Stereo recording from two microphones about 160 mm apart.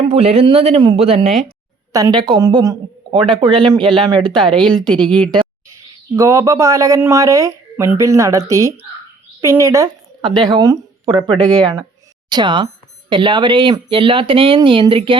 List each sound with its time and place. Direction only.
0.1 s speech: 40° right (ahead or behind)
1.9 s speech: 25° right (ahead or behind)
4.2 s speech: 5° left (ahead or behind)
6.1 s a woman's voice: 20° right (ahead or behind)